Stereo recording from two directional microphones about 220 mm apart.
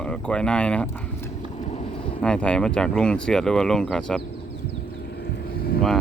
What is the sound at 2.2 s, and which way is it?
Speech, 5° left (ahead or behind).